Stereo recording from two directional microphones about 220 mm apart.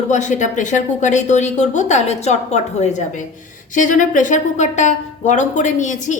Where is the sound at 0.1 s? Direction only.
35° left (ahead or behind).